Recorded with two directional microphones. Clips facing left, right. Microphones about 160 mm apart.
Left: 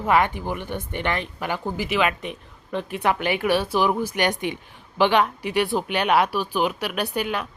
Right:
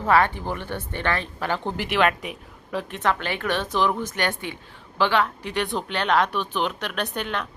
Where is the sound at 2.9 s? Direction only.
15° left (ahead or behind).